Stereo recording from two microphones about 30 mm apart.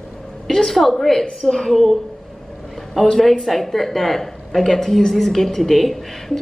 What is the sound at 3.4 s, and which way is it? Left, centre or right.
Speech, centre.